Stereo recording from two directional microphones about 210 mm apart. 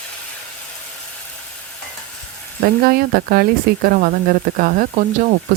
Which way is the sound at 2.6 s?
45° right (ahead or behind).